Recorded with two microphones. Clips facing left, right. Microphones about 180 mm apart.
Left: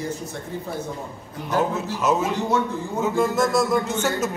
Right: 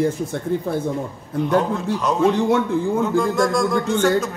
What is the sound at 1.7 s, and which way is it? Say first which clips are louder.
A man's voice: right 1 dB; 5° left (ahead or behind).